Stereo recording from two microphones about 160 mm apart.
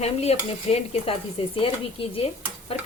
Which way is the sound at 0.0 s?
40° left (ahead or behind).